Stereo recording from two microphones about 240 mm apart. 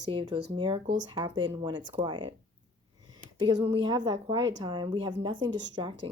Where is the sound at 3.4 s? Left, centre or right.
Centre.